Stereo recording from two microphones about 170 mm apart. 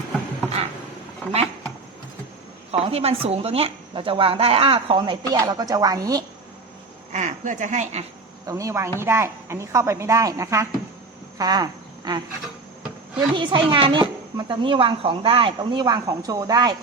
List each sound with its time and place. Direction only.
2.7 s speech: 35° right (ahead or behind)
7.1 s speech: 45° right (ahead or behind)
8.4 s a woman's voice: 20° right (ahead or behind)
13.3 s speech: 25° right (ahead or behind)